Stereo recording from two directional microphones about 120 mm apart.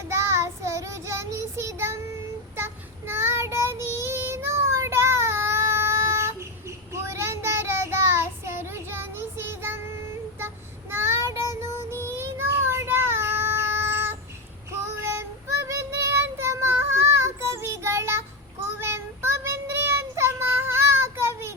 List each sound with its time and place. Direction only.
0.1 s child singing: 20° right (ahead or behind)